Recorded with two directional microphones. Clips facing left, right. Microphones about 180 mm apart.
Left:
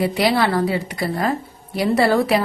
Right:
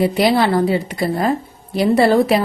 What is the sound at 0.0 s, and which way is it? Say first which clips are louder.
A woman's voice: right 3 dB; 25° right (ahead or behind).